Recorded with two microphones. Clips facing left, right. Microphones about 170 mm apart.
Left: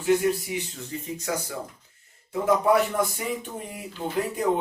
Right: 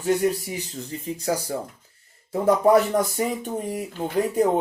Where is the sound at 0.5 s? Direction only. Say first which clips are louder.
Even; 40° right (ahead or behind).